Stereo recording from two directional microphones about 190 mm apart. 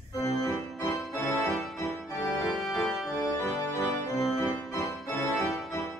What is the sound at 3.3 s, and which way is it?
Organ, 15° left (ahead or behind).